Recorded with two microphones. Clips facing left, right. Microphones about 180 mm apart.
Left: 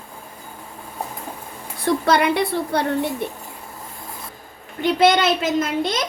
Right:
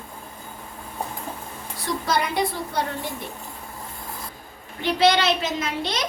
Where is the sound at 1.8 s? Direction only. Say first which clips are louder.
Left 7 dB; 60° left (ahead or behind).